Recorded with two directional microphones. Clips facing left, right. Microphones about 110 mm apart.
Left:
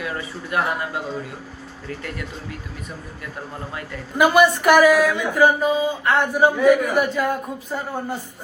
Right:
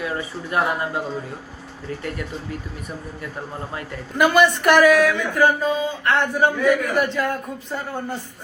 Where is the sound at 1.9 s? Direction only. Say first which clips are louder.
Right 2 dB; 30° right (ahead or behind).